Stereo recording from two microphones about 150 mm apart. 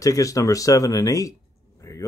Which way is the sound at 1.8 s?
20° left (ahead or behind).